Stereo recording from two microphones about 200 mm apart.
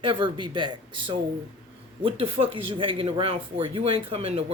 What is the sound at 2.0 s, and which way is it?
Speech, 25° right (ahead or behind).